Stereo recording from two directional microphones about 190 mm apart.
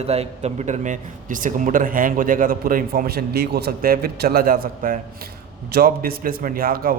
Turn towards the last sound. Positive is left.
turn(degrees=-50)  # may be behind; listen again after turning